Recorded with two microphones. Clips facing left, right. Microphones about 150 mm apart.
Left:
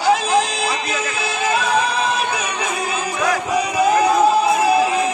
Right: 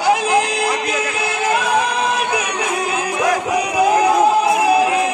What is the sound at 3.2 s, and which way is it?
Music, 15° right (ahead or behind).